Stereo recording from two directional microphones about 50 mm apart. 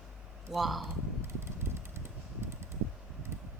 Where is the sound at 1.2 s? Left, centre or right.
Right.